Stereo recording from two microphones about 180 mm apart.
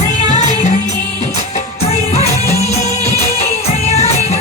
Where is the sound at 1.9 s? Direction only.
35° left (ahead or behind).